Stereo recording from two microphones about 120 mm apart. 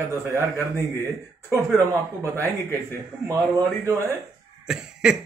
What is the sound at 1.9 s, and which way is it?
Speech, 25° right (ahead or behind).